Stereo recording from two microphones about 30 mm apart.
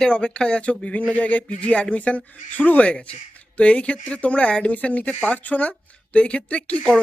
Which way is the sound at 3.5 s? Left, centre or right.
Left.